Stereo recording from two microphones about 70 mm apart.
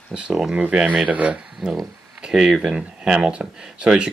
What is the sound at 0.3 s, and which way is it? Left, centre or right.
Speech, centre.